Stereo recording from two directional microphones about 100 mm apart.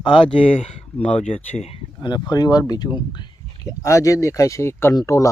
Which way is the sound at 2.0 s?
45° left (ahead or behind).